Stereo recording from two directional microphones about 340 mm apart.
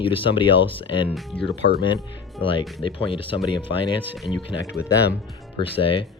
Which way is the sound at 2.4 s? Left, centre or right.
Centre.